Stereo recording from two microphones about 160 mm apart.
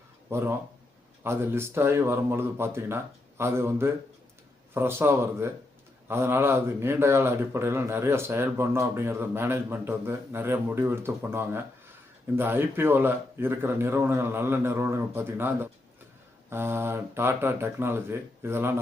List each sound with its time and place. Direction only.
0.3 s speech: 15° right (ahead or behind)